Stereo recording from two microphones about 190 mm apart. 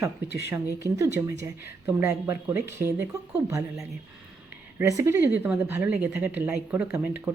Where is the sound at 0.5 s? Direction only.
15° right (ahead or behind).